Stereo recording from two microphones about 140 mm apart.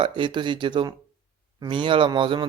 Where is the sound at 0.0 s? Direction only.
35° right (ahead or behind).